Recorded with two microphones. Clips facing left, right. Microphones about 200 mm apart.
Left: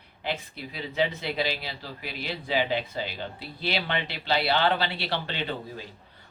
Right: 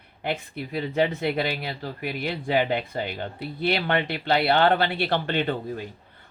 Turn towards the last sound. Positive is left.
turn(degrees=-55)  # may be behind; listen again after turning